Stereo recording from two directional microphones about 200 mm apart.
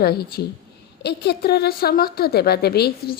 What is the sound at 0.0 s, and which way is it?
A woman's voice, 50° left (ahead or behind).